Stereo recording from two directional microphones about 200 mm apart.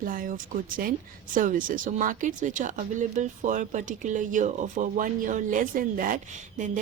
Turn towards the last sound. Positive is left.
turn(degrees=-40)  # may be behind; listen again after turning